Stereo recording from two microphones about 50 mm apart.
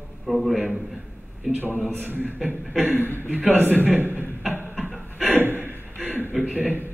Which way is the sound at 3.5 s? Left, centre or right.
Right.